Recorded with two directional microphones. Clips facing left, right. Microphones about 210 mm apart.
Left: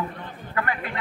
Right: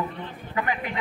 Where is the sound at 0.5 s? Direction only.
15° right (ahead or behind).